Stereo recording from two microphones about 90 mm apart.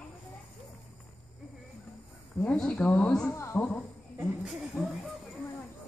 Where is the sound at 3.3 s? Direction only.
30° left (ahead or behind).